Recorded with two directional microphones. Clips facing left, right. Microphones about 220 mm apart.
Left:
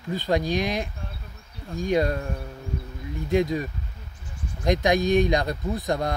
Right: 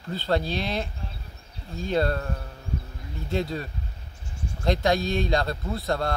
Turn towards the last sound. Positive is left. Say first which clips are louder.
# left 1 dB
turn(degrees=15)  # may be behind; listen again after turning